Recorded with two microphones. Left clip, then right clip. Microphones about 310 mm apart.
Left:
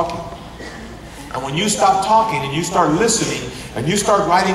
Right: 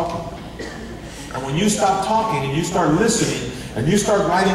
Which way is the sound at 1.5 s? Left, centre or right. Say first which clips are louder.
Left 3 dB; centre.